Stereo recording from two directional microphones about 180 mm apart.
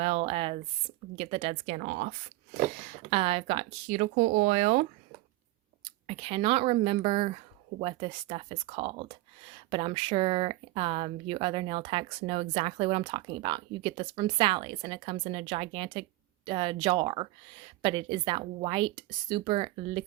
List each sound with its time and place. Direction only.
0.0 s a sound: 35° right (ahead or behind)
1.1 s speech: 30° right (ahead or behind)
1.7 s speech: 50° right (ahead or behind)
2.8 s speech: 35° right (ahead or behind)